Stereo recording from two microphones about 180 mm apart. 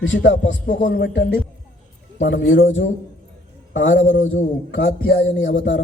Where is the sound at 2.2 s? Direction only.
90° left.